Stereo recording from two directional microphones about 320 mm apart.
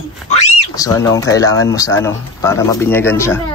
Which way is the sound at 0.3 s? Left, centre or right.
Centre.